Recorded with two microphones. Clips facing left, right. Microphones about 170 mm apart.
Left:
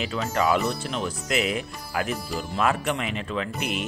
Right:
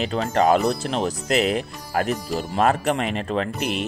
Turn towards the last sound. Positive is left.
turn(degrees=0)  # may be behind; listen again after turning